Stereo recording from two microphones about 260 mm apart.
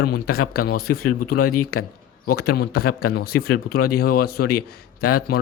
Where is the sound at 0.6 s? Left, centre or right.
Left.